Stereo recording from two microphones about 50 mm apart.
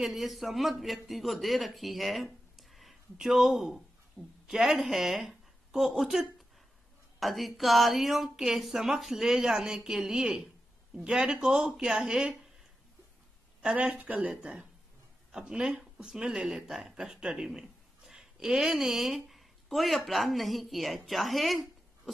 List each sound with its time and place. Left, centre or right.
0.0 s a man's voice: centre
2.5 s a sound: centre
4.2 s a woman's voice: centre
13.7 s speech: right
14.2 s a woman's voice: centre